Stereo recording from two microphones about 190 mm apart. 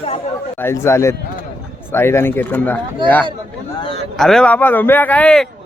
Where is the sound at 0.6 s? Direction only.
15° left (ahead or behind).